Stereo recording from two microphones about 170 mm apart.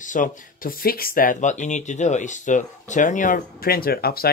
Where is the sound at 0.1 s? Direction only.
55° left (ahead or behind).